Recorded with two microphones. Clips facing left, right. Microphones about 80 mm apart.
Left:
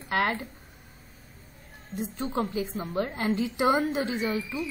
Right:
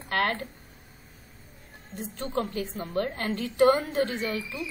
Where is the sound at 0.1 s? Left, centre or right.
Centre.